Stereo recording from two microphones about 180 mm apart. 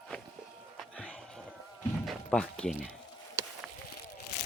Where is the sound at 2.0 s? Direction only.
5° left (ahead or behind).